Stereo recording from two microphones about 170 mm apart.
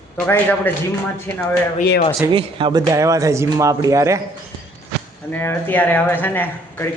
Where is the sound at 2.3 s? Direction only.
30° right (ahead or behind).